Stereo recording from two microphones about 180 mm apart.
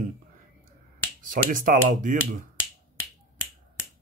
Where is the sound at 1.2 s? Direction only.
50° right (ahead or behind).